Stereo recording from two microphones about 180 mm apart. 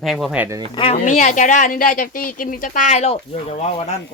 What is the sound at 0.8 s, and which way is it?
Speech, 35° left (ahead or behind).